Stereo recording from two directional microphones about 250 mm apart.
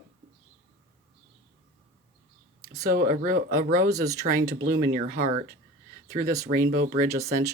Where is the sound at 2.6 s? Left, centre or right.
Centre.